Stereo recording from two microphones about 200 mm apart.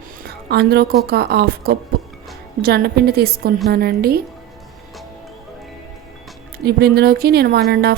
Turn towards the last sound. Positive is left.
turn(degrees=-50)  # may be behind; listen again after turning